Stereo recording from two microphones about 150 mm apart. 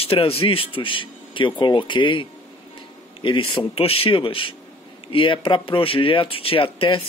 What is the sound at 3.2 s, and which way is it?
Speech, 35° left (ahead or behind).